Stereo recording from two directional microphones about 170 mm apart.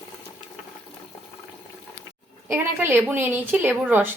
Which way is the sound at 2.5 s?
10° right (ahead or behind).